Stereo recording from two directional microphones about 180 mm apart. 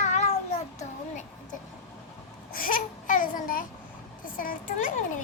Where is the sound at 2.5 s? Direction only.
50° left (ahead or behind).